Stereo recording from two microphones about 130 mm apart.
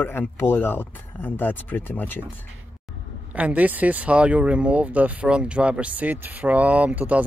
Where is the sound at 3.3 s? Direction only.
10° right (ahead or behind).